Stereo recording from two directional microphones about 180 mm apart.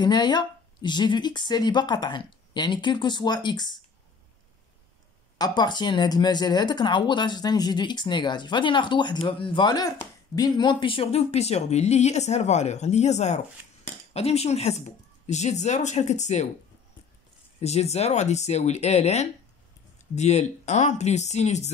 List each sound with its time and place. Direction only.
0.0 s speech: 25° left (ahead or behind)
5.4 s speech: 25° left (ahead or behind); by 16.4 s 40° left (ahead or behind)
17.6 s speech: 35° left (ahead or behind)